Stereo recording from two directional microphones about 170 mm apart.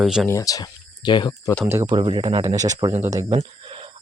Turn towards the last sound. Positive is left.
turn(degrees=-30)  # may be behind; listen again after turning